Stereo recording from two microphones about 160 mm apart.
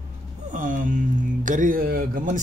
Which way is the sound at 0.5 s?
55° right (ahead or behind).